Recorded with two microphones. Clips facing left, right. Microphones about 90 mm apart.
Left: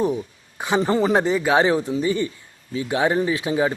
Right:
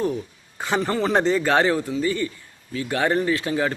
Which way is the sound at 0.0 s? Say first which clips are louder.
Left 3 dB; 15° left (ahead or behind).